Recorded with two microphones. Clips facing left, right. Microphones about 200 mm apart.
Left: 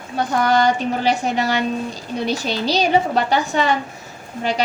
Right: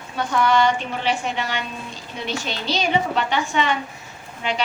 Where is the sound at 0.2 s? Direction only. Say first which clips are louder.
Left 2 dB; 40° left (ahead or behind).